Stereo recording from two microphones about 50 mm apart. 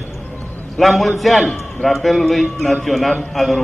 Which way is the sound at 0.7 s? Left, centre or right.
Centre.